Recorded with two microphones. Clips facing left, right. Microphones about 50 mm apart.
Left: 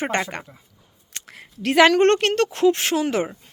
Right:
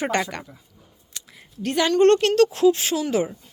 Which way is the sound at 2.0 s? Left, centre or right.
Left.